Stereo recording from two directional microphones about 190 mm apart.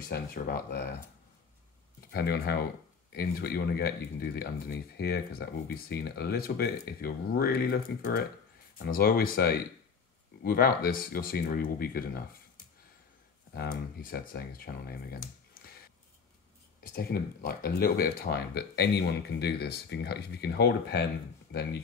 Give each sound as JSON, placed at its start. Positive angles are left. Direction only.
{"t": 0.1, "sound": "speech", "side_deg": 55}
{"t": 2.1, "sound": "speech", "side_deg": 55}
{"t": 13.6, "sound": "speech", "side_deg": 55}
{"t": 15.6, "sound": "a sound", "side_deg": 50}
{"t": 16.8, "sound": "speech", "side_deg": 50}